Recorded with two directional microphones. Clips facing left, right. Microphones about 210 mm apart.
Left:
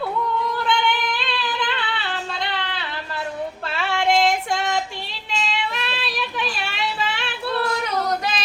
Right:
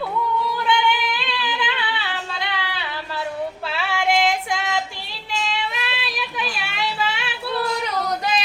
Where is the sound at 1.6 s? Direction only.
10° right (ahead or behind).